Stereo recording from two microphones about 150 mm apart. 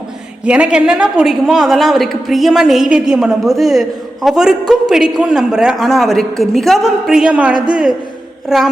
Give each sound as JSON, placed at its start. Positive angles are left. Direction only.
{"t": 0.4, "sound": "a woman's voice", "side_deg": -5}